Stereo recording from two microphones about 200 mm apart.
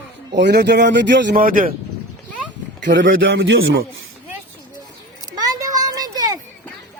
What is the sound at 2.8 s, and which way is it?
Speech, 65° right (ahead or behind).